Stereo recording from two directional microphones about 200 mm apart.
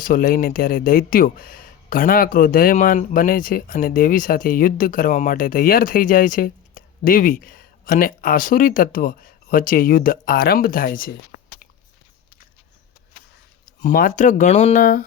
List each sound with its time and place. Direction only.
0.0 s speech: 45° left (ahead or behind)
13.8 s speech: 40° left (ahead or behind)